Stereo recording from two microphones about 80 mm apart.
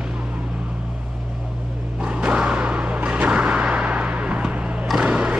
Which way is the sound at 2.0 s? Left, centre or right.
Centre.